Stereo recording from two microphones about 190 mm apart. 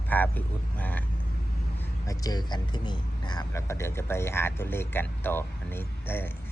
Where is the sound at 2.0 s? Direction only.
20° left (ahead or behind).